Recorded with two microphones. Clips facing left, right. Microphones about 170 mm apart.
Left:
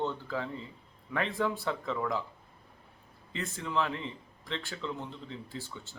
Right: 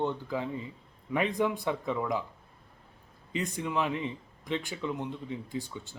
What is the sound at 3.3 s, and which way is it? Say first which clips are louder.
Speech: right 4 dB; 15° right (ahead or behind).